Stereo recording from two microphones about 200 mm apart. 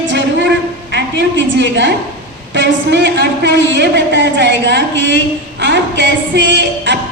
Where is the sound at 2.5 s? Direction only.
60° right (ahead or behind).